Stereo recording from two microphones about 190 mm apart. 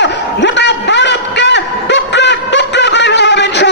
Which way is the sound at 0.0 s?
65° left (ahead or behind).